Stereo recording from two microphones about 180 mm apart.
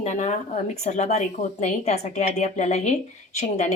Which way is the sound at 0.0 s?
40° left (ahead or behind).